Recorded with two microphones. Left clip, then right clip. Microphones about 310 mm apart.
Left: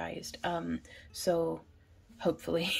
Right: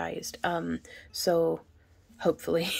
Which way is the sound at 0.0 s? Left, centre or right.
Centre.